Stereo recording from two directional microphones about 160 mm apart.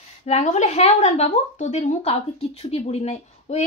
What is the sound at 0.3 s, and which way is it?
A woman's voice, 45° left (ahead or behind).